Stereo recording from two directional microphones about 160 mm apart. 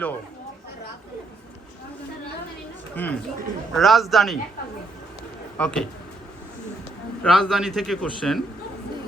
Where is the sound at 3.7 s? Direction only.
Centre (ahead or behind).